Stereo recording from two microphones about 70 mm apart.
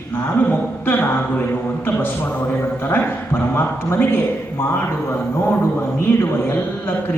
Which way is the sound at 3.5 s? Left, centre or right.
Left.